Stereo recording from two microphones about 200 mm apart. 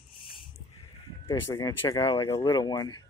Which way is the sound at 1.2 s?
15° left (ahead or behind).